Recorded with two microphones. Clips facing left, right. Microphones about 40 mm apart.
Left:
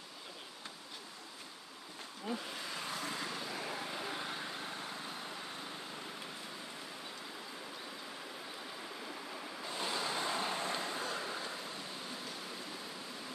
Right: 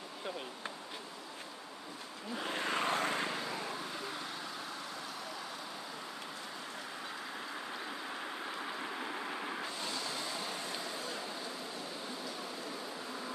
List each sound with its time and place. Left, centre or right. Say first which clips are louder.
2.4 s vehicle: right 8 dB; right
3.5 s vehicle: right 1 dB; centre
8.6 s waves: right 5 dB; right
9.8 s vehicle: left 2 dB; centre